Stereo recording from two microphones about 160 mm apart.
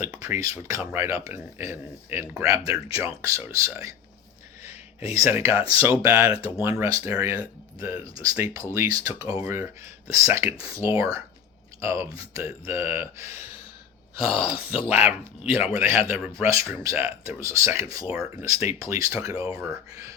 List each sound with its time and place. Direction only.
0.0 s speech: 15° right (ahead or behind)
4.6 s a sound: 15° right (ahead or behind)
5.1 s speech: 20° right (ahead or behind)
14.3 s speech: 35° left (ahead or behind)
14.8 s speech: 15° right (ahead or behind)